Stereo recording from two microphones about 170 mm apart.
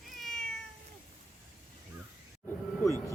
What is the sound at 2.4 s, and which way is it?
Music, 15° left (ahead or behind).